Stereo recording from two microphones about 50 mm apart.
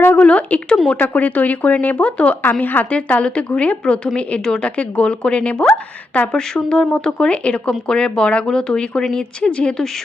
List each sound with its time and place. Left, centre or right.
0.2 s a woman's voice: left
2.4 s a woman's voice: left